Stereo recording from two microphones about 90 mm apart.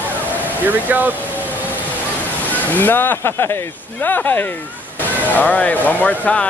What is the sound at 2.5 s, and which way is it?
Speech, 20° left (ahead or behind).